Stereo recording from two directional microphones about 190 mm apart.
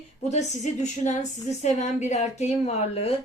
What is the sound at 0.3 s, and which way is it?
A woman's voice, 40° left (ahead or behind).